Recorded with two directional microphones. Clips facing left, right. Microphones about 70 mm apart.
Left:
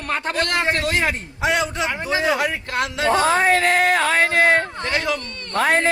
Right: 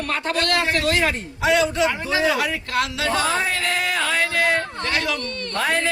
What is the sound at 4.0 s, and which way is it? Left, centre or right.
A man's voice, left.